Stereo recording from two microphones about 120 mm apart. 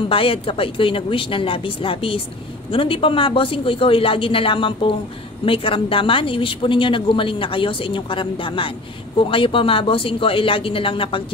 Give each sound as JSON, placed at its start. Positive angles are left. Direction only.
{"t": 0.1, "sound": "speech", "side_deg": 50}